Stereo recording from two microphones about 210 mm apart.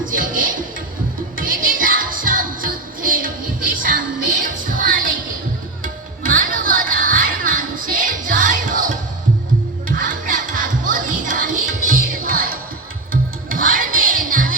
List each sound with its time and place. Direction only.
0.0 s speech: 40° right (ahead or behind)
1.4 s music: 40° right (ahead or behind)